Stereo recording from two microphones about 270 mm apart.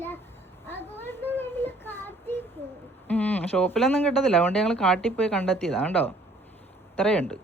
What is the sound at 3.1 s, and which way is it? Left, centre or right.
Speech, centre.